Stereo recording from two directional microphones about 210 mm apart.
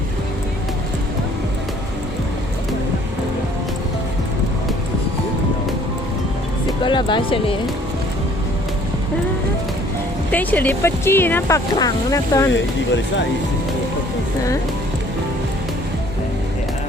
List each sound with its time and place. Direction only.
6.8 s speech: 25° left (ahead or behind)
10.3 s speech: 10° left (ahead or behind)